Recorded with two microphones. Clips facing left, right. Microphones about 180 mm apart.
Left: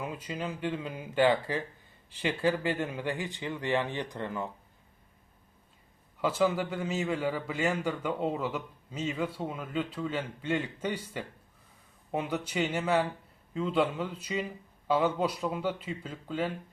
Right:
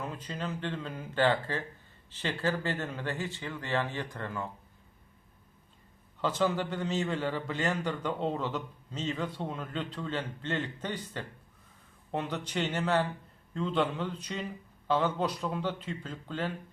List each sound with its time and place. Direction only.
0.0 s a man's voice: 10° left (ahead or behind)
6.2 s a man's voice: 10° left (ahead or behind)